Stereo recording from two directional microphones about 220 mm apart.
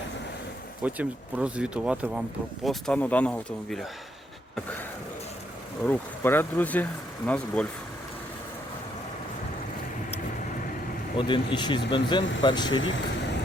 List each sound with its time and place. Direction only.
0.8 s speech: 5° right (ahead or behind)
5.8 s speech: 10° left (ahead or behind)
11.2 s speech: 20° left (ahead or behind)
12.7 s speech: 60° left (ahead or behind)